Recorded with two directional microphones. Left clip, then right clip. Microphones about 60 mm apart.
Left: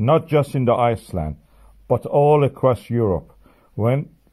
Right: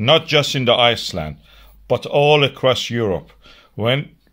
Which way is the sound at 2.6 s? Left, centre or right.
Centre.